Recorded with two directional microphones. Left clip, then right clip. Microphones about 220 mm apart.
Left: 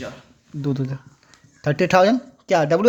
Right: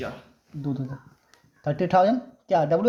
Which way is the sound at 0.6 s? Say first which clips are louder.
Left 6 dB; 40° left (ahead or behind).